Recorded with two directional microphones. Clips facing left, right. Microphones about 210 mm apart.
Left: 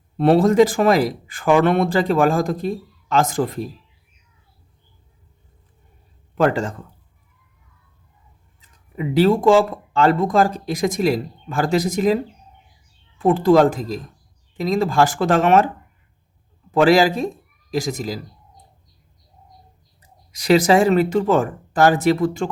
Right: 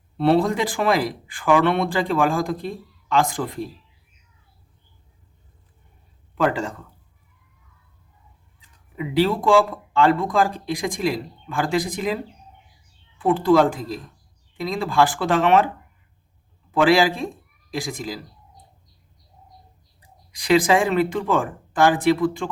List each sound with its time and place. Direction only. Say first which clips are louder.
0.2 s speech: left 5 dB; 45° left (ahead or behind)
6.3 s speech: left 3 dB; 45° left (ahead or behind)
8.6 s speech: left 4 dB; 45° left (ahead or behind)
16.7 s speech: left 3 dB; 40° left (ahead or behind)
20.0 s speech: left 1 dB; 40° left (ahead or behind)